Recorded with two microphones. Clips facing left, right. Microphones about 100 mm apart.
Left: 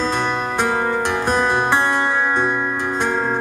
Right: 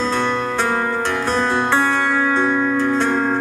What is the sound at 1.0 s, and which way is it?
Music, 15° left (ahead or behind).